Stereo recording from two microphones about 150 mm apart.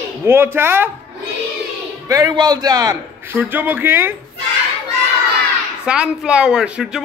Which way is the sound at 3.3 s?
15° right (ahead or behind).